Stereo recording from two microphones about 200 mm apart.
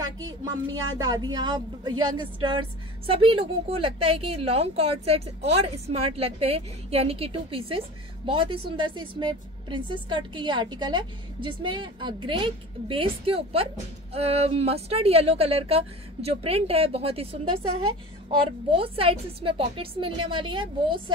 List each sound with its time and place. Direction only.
0.9 s a woman's voice: 20° right (ahead or behind)
18.8 s a woman's voice: 25° right (ahead or behind)